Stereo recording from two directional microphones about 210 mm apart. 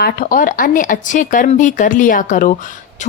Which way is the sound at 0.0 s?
40° left (ahead or behind).